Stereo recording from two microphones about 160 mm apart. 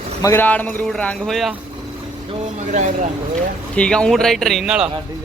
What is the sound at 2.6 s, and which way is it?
Speech, 50° right (ahead or behind).